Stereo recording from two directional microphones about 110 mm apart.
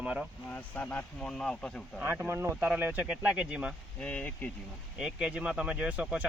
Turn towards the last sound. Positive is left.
turn(degrees=-10)  # may be behind; listen again after turning